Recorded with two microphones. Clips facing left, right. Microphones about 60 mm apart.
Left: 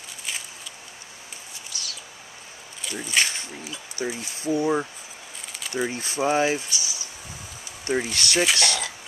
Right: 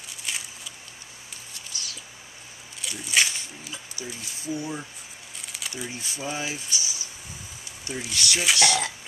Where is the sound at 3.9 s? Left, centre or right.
Left.